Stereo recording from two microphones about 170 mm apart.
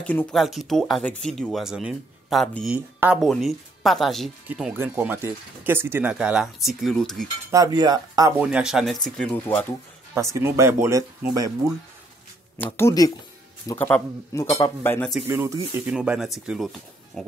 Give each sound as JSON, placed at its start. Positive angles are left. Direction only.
{"t": 0.0, "sound": "speech", "side_deg": 10}
{"t": 7.5, "sound": "cutlery", "side_deg": -20}
{"t": 8.4, "sound": "speech", "side_deg": -5}
{"t": 10.1, "sound": "speech", "side_deg": -20}
{"t": 12.5, "sound": "speech", "side_deg": 10}
{"t": 15.2, "sound": "speech", "side_deg": -15}
{"t": 15.9, "sound": "speech", "side_deg": -5}